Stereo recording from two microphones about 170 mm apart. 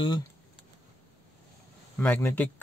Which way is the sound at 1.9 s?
10° left (ahead or behind).